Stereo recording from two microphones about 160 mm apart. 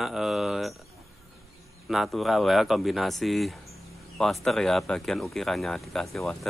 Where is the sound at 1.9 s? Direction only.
Centre (ahead or behind).